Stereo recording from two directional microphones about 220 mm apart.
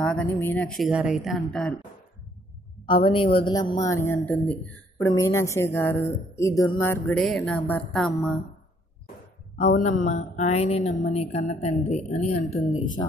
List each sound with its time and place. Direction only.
0.0 s a woman's voice: 5° left (ahead or behind)
2.9 s speech: 25° left (ahead or behind); by 8.4 s centre (ahead or behind)
9.8 s speech: 35° left (ahead or behind)